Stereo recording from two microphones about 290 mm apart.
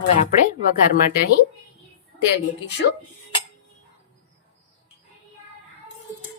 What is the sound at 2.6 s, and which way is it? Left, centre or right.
Speech, left.